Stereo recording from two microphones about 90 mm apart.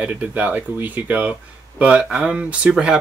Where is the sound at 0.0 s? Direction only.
15° right (ahead or behind).